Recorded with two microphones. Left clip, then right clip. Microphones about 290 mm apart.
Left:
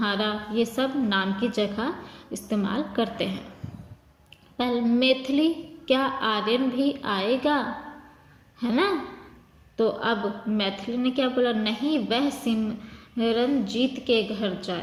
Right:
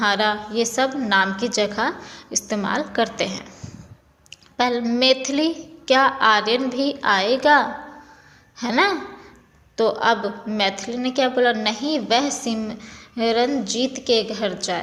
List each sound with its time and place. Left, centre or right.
0.0 s a woman's voice: right
4.5 s a woman's voice: right